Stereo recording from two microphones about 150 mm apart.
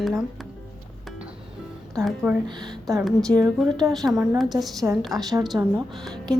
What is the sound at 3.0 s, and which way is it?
A woman's voice, centre (ahead or behind).